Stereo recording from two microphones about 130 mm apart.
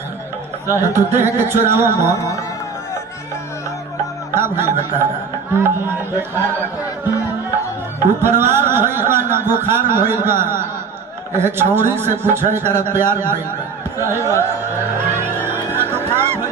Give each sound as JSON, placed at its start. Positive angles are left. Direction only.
{"t": 0.7, "sound": "speech", "side_deg": -20}
{"t": 2.1, "sound": "speech", "side_deg": 25}
{"t": 4.4, "sound": "speech", "side_deg": -20}
{"t": 8.2, "sound": "speech", "side_deg": -20}
{"t": 15.2, "sound": "neigh", "side_deg": -15}